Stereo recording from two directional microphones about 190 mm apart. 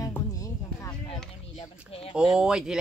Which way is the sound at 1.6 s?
30° left (ahead or behind).